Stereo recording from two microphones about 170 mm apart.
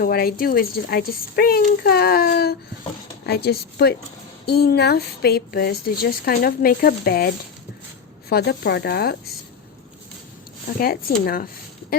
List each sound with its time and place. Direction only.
0.0 s speech: 60° left (ahead or behind)
8.3 s speech: 70° left (ahead or behind)
10.8 s speech: 60° left (ahead or behind)